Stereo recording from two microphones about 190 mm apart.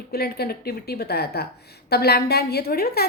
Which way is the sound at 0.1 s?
55° left (ahead or behind).